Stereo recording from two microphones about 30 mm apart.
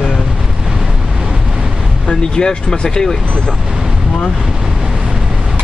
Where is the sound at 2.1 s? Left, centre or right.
Left.